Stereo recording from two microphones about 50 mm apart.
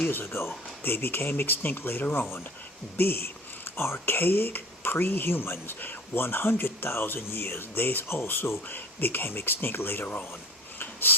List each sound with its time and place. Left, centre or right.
0.0 s speech: left
3.8 s speech: left